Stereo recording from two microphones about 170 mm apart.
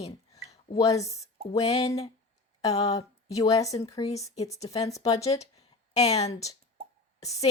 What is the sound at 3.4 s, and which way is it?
Speech, 20° left (ahead or behind).